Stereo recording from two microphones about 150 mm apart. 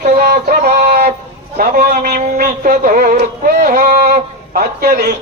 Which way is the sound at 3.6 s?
60° right (ahead or behind).